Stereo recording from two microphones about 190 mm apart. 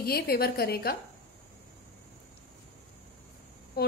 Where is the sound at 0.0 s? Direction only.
55° left (ahead or behind).